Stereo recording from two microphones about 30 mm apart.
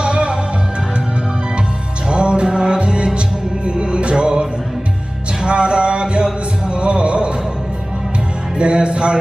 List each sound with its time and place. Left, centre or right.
0.0 s music: right
2.0 s music: right
5.5 s music: right
8.5 s music: right